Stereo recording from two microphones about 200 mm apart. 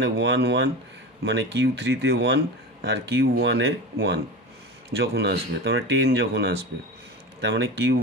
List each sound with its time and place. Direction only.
0.0 s speech: 65° right (ahead or behind)